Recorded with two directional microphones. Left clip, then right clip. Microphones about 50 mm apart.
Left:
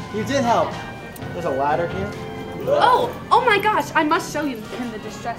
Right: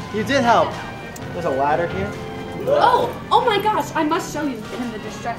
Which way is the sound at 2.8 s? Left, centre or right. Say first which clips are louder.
Even; left.